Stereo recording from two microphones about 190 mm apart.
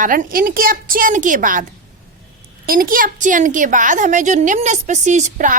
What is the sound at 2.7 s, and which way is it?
A woman's voice, 50° right (ahead or behind).